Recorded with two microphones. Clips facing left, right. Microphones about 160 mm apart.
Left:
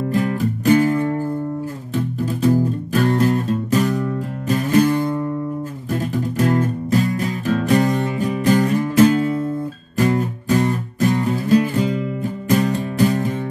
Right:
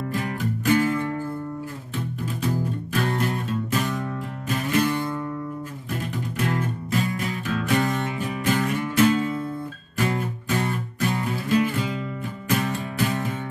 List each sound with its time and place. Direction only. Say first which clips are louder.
0.3 s music: left 5 dB; 40° left (ahead or behind)
2.9 s music: left 8 dB; 40° left (ahead or behind)